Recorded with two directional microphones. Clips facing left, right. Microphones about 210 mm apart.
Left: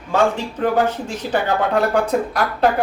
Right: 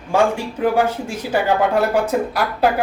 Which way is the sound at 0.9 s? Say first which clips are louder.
Even; 10° right (ahead or behind).